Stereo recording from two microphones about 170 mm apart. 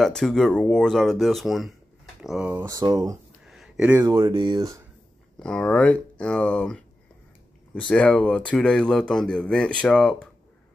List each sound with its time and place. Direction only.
0.0 s speech: centre (ahead or behind)
2.5 s speech: 20° right (ahead or behind)
3.4 s a sound: centre (ahead or behind)
4.0 s speech: 25° right (ahead or behind)
5.4 s speech: 5° left (ahead or behind)